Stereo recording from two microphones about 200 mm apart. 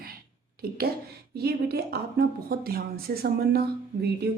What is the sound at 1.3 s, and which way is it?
Speech, 50° right (ahead or behind).